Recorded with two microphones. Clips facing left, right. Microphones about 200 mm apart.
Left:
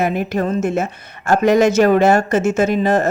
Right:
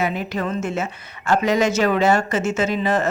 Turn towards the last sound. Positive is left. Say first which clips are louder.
# left 5 dB
turn(degrees=45)  # may be behind; listen again after turning